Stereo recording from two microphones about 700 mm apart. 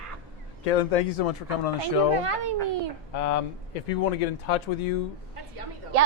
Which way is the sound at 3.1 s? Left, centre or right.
Left.